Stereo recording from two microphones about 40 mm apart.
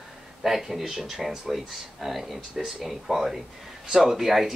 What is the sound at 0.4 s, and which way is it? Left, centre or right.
Speech, centre.